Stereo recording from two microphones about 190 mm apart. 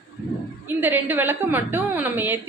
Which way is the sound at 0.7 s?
10° right (ahead or behind).